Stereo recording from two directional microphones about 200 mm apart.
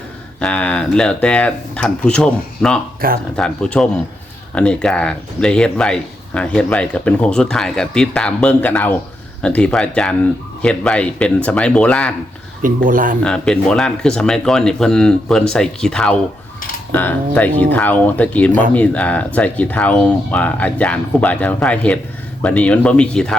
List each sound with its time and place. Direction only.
0.3 s speech: 5° left (ahead or behind)
12.6 s speech: 45° right (ahead or behind)
13.2 s speech: 5° left (ahead or behind)